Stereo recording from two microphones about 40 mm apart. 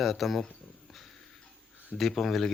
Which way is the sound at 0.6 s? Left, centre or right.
Centre.